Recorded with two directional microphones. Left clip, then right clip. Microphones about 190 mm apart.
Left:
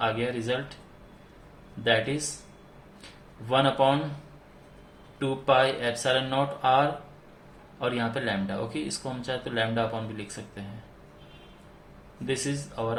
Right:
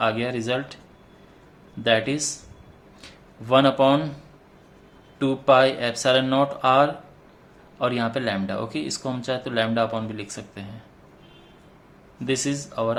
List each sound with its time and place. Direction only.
0.0 s speech: 35° right (ahead or behind)
1.8 s speech: 40° right (ahead or behind)
3.5 s speech: 35° right (ahead or behind)
5.2 s speech: 35° right (ahead or behind)
12.2 s speech: 40° right (ahead or behind)